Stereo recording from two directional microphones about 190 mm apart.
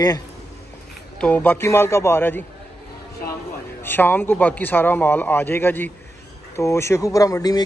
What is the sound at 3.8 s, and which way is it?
A man's voice, 10° left (ahead or behind).